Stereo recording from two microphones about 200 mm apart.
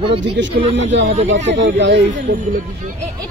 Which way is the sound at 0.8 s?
35° right (ahead or behind).